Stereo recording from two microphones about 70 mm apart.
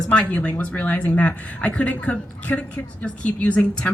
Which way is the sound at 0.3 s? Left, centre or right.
Left.